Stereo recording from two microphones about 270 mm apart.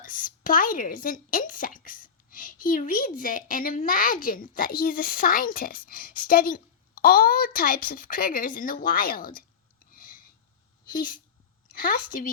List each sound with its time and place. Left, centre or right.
0.0 s speech: left
9.9 s a sound: left
10.8 s a woman's voice: left